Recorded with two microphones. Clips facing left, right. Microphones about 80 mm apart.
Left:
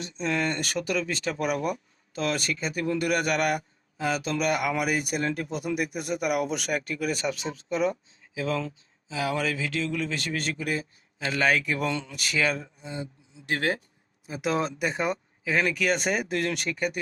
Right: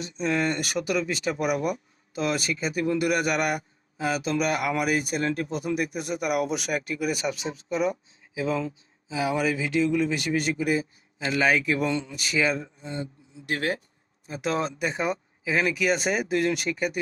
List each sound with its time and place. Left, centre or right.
0.0 s speech: centre
12.8 s speech: centre
13.4 s speech: left
14.3 s speech: centre